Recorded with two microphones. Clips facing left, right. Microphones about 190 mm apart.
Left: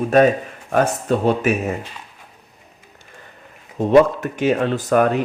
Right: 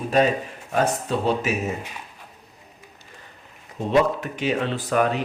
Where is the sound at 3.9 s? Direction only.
50° left (ahead or behind).